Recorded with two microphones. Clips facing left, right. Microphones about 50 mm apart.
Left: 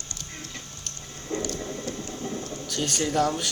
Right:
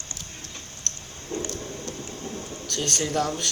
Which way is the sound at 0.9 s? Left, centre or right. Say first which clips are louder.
Right 4 dB; centre.